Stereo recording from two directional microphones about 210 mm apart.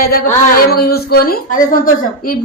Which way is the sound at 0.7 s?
45° left (ahead or behind).